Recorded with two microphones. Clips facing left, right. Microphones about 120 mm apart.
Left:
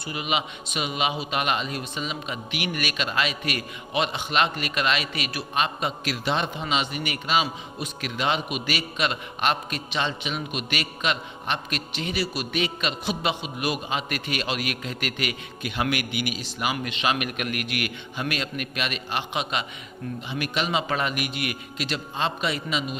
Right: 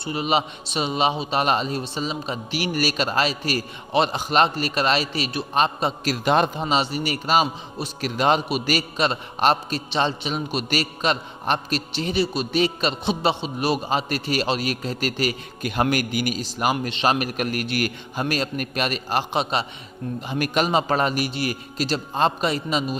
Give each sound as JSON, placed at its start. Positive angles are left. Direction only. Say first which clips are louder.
{"t": 0.0, "sound": "a man's voice", "louder": "right 5 dB", "side_deg": -30}
{"t": 6.2, "sound": "a man's voice", "louder": "right 7 dB", "side_deg": -45}